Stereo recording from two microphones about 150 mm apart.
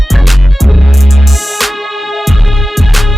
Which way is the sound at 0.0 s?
Centre (ahead or behind).